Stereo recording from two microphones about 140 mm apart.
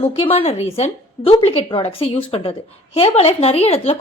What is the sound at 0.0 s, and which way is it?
Speech, 45° left (ahead or behind).